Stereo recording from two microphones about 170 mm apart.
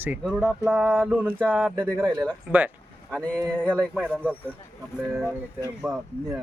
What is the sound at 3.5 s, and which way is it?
Speech, 5° left (ahead or behind).